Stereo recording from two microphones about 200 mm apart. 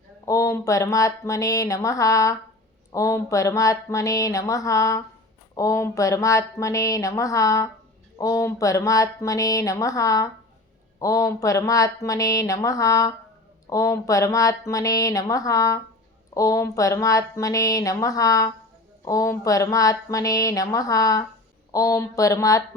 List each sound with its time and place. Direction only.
0.3 s speech: 15° left (ahead or behind)